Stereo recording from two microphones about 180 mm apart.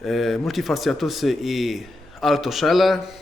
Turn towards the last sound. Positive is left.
turn(degrees=0)  # may be behind; listen again after turning